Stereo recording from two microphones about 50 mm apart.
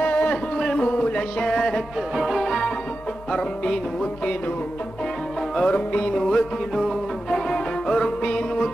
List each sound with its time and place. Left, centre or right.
0.0 s a sound: left
0.7 s music: left
2.1 s music: centre
2.4 s music: centre
5.6 s music: left
6.2 s music: centre